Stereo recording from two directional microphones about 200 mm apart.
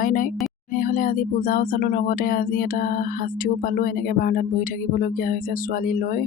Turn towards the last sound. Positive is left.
turn(degrees=45)  # may be behind; listen again after turning